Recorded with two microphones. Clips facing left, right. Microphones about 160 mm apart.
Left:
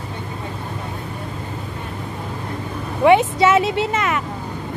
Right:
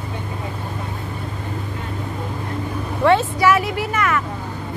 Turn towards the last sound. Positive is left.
turn(degrees=20)  # may be behind; listen again after turning